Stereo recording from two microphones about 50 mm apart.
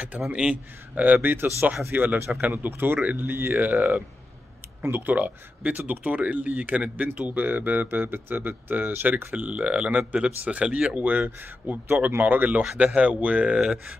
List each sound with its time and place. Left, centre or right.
0.3 s speech: right
0.9 s speech: right
12.7 s speech: right